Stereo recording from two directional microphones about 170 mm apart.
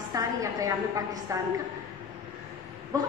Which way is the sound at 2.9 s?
20° right (ahead or behind).